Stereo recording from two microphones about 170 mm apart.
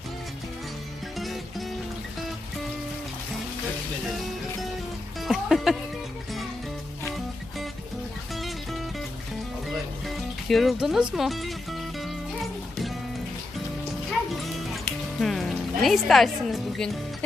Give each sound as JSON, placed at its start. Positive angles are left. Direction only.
{"t": 1.2, "sound": "music", "side_deg": 0}
{"t": 5.2, "sound": "music", "side_deg": 0}
{"t": 8.4, "sound": "music", "side_deg": 0}
{"t": 10.1, "sound": "speech", "side_deg": 0}
{"t": 14.1, "sound": "music", "side_deg": 0}
{"t": 15.2, "sound": "speech", "side_deg": 0}